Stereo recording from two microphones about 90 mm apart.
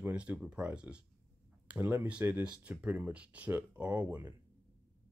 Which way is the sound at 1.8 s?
25° right (ahead or behind).